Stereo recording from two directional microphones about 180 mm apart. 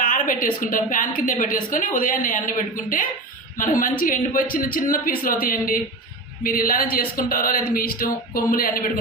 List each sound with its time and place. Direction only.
0.0 s a woman's voice: 50° left (ahead or behind)